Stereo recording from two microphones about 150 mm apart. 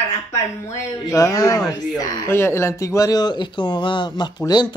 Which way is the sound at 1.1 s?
25° left (ahead or behind).